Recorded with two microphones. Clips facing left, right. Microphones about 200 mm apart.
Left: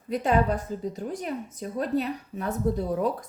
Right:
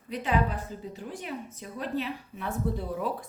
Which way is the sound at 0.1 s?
45° left (ahead or behind).